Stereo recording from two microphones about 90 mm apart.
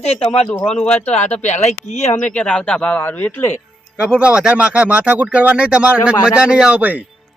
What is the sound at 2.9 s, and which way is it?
Speech, 25° left (ahead or behind).